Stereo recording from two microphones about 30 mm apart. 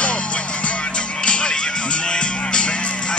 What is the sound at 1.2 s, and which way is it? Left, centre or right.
Music, left.